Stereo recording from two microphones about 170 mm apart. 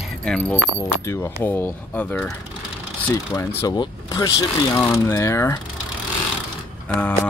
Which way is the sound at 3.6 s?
25° left (ahead or behind).